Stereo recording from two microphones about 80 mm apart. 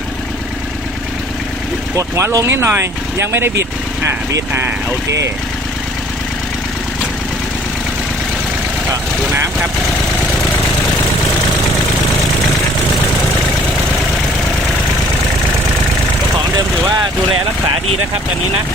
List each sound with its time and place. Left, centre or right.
2.0 s speech: right